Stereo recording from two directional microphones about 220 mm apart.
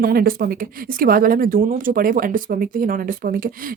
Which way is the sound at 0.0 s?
40° right (ahead or behind).